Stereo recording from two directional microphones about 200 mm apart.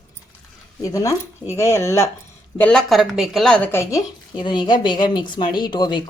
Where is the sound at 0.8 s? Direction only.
15° left (ahead or behind).